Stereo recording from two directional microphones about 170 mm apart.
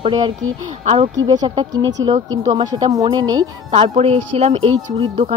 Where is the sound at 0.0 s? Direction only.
25° right (ahead or behind).